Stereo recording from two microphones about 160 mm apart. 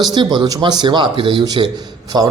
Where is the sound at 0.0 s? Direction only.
25° right (ahead or behind).